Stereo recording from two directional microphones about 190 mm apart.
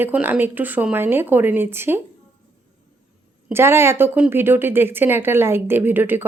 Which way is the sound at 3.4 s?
15° right (ahead or behind).